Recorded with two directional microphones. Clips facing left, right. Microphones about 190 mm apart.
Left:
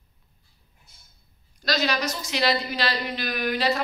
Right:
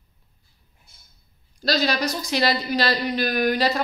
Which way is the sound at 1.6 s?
35° right (ahead or behind).